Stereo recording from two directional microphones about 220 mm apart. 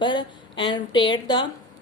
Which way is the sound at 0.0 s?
20° left (ahead or behind).